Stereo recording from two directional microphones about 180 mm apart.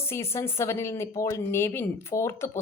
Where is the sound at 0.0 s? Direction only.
15° left (ahead or behind).